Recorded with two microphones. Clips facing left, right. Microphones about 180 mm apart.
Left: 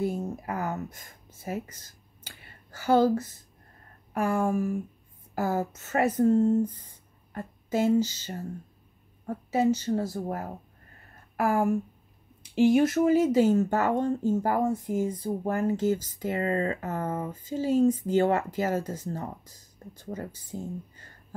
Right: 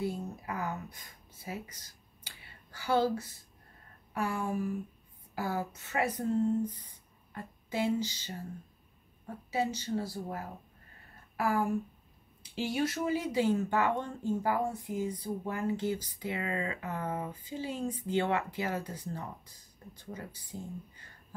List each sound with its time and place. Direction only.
0.0 s speech: 45° left (ahead or behind)
2.2 s a sound: 45° left (ahead or behind)
4.1 s speech: 50° left (ahead or behind)